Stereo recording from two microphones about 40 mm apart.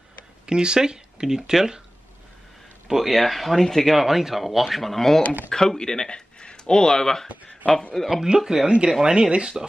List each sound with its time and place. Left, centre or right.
0.5 s speech: right
2.9 s speech: centre
8.1 s speech: centre